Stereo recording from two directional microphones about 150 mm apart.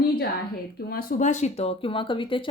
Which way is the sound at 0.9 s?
65° left (ahead or behind).